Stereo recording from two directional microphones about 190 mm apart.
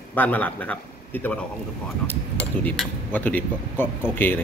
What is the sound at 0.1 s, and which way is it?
A man's voice, 10° left (ahead or behind).